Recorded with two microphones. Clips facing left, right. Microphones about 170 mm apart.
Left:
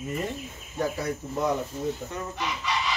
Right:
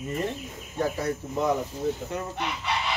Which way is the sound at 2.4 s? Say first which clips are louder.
Left 3 dB; 60° right (ahead or behind).